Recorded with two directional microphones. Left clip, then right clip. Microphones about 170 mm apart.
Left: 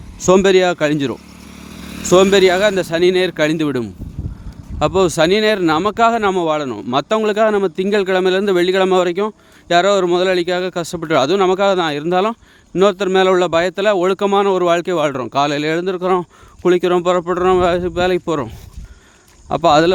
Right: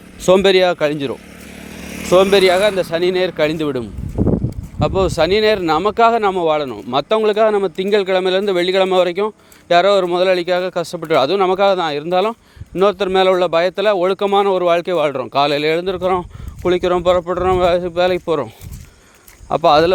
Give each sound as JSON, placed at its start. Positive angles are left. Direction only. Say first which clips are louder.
{"t": 0.2, "sound": "speech", "louder": "even", "side_deg": 25}
{"t": 1.8, "sound": "vehicle", "louder": "right 2 dB", "side_deg": 5}
{"t": 2.0, "sound": "a man's voice", "louder": "even", "side_deg": 40}
{"t": 4.8, "sound": "a man's voice", "louder": "left 2 dB", "side_deg": 35}